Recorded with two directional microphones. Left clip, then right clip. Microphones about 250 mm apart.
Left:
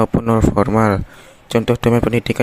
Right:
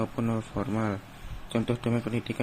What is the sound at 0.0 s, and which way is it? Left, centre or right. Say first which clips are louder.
Speech: left 16 dB; left.